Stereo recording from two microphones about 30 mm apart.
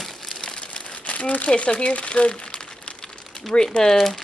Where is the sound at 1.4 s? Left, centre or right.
Left.